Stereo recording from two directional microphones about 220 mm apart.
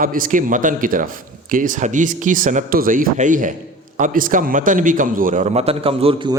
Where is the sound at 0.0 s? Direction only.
40° right (ahead or behind).